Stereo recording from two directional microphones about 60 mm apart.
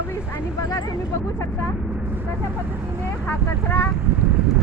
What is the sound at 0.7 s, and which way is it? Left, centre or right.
Speech, left.